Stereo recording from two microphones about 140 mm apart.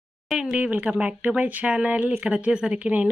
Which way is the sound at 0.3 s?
5° right (ahead or behind).